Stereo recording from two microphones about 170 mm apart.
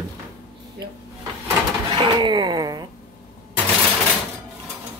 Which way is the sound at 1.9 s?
25° right (ahead or behind).